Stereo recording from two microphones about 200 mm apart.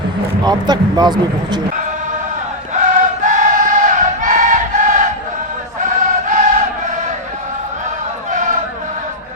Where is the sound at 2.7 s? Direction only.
40° right (ahead or behind).